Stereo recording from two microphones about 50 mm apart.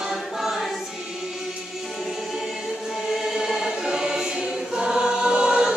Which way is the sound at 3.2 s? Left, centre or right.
Centre.